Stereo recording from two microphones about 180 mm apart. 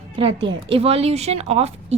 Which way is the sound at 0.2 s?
30° right (ahead or behind).